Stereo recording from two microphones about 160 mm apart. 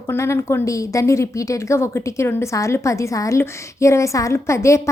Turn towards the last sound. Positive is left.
turn(degrees=20)  # may be behind; listen again after turning